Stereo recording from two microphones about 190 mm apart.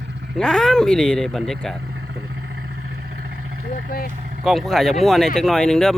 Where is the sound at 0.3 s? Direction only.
5° left (ahead or behind).